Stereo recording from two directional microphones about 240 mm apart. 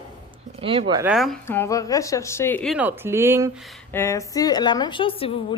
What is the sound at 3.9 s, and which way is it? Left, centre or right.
A woman's voice, centre.